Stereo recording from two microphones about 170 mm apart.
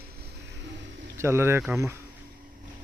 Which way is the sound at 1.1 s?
15° right (ahead or behind).